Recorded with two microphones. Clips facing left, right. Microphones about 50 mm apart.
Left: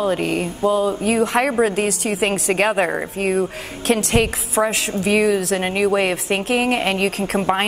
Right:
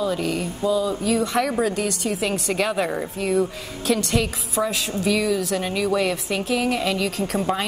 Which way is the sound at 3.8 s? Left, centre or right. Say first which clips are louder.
Left 4 dB; left.